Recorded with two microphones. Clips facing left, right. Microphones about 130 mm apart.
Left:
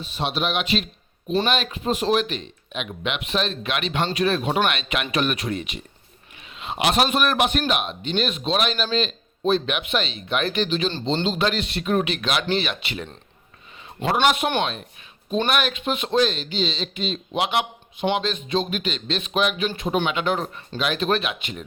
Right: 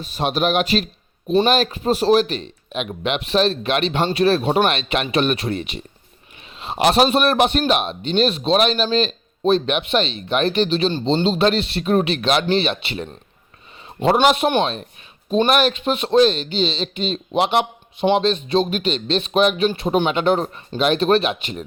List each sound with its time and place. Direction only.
0.0 s a man's voice: 45° right (ahead or behind)
14.4 s a man's voice: 30° right (ahead or behind)